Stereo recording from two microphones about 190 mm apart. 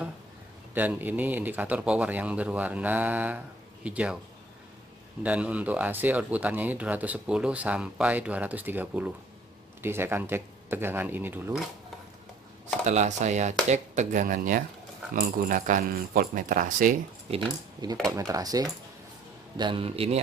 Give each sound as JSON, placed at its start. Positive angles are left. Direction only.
{"t": 0.7, "sound": "speech", "side_deg": -10}
{"t": 5.2, "sound": "speech", "side_deg": -5}
{"t": 12.8, "sound": "speech", "side_deg": -40}
{"t": 17.3, "sound": "speech", "side_deg": -20}